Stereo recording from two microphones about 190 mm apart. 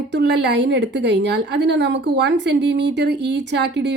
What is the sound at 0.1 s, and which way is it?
Speech, 65° right (ahead or behind).